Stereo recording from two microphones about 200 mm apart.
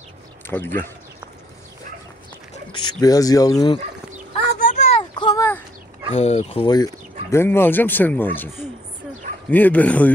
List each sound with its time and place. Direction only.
0.5 s speech: 10° left (ahead or behind)
3.0 s speech: 20° left (ahead or behind)
4.6 s a sound: 35° left (ahead or behind); by 5.6 s 15° left (ahead or behind)
6.1 s speech: 35° left (ahead or behind); by 8.5 s 10° left (ahead or behind)
9.5 s speech: 10° left (ahead or behind)